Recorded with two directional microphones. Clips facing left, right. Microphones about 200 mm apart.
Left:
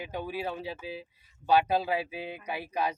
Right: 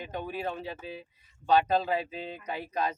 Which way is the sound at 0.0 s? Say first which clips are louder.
Even; 10° left (ahead or behind).